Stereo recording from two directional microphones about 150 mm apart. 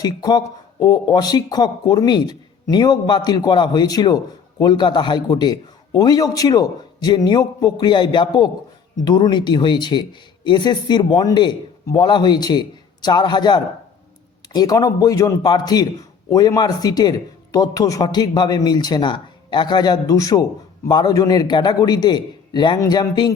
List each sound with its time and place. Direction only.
0.0 s speech: 25° left (ahead or behind)